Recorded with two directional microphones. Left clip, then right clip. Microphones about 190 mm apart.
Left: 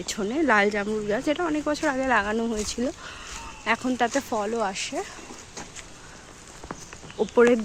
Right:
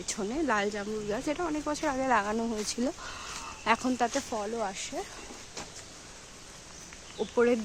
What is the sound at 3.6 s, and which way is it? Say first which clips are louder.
Speech: left 2 dB; 20° right (ahead or behind).